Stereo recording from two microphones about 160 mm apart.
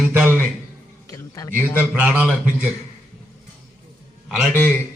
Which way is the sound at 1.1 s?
20° left (ahead or behind).